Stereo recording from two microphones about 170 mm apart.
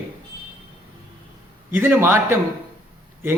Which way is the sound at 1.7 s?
15° right (ahead or behind).